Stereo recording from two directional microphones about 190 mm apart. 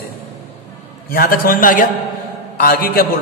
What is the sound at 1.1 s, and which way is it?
A man's voice, 50° left (ahead or behind).